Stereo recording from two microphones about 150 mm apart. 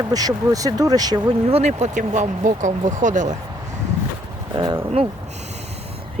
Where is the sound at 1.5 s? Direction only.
50° right (ahead or behind).